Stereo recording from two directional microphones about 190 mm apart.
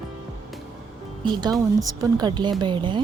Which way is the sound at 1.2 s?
25° right (ahead or behind).